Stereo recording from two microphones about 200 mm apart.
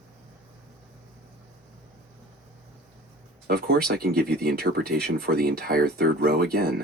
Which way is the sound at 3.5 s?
50° right (ahead or behind).